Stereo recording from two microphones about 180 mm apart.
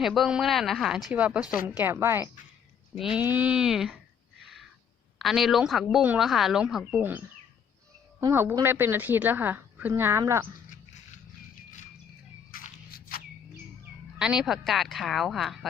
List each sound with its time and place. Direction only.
0.0 s a woman's voice: centre (ahead or behind)
2.9 s a woman's voice: 5° right (ahead or behind)
5.2 s a woman's voice: centre (ahead or behind)
8.2 s a woman's voice: 10° right (ahead or behind)
12.5 s a sound: 50° left (ahead or behind)
14.2 s a woman's voice: 5° right (ahead or behind)